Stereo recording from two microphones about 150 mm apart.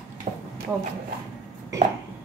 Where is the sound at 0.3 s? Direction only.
55° right (ahead or behind).